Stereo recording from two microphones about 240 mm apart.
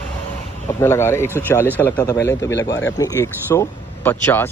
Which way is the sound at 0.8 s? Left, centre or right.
Centre.